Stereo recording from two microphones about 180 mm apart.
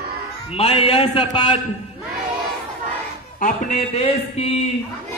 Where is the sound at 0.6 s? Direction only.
35° left (ahead or behind).